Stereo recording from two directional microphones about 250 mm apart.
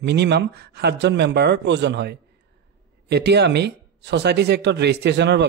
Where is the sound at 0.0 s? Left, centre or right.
Right.